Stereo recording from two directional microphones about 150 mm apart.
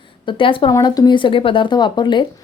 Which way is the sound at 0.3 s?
35° left (ahead or behind).